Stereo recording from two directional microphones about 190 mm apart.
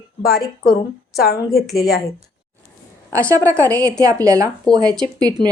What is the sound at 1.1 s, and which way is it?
Speech, 55° left (ahead or behind).